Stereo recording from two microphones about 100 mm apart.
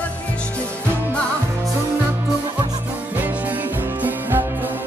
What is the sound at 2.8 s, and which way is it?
Music, 15° right (ahead or behind).